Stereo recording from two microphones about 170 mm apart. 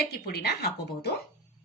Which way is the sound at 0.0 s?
65° left (ahead or behind).